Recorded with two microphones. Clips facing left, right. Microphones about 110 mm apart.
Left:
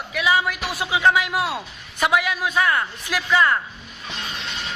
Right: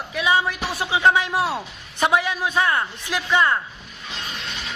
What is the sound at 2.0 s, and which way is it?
A man's voice, 30° right (ahead or behind).